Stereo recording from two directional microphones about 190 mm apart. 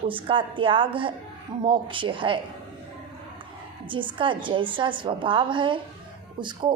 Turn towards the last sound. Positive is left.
turn(degrees=-25)  # may be behind; listen again after turning